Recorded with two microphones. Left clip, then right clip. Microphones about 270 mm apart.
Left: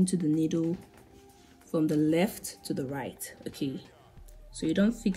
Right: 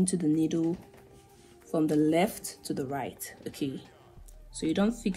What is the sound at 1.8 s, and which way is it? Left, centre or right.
Speech, centre.